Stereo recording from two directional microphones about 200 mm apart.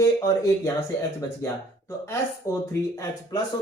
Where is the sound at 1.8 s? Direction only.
15° left (ahead or behind).